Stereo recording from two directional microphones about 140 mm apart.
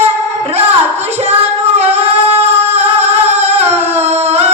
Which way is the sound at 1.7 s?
50° right (ahead or behind).